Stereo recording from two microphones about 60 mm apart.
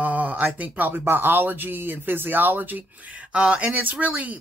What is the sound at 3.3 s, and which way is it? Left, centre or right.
Speech, centre.